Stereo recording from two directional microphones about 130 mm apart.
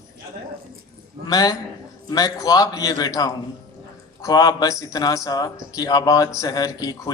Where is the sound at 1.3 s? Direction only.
30° left (ahead or behind).